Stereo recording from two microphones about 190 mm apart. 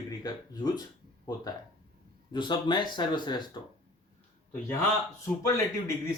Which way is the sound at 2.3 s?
25° left (ahead or behind).